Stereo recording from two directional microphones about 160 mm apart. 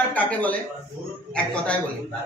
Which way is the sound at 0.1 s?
10° left (ahead or behind).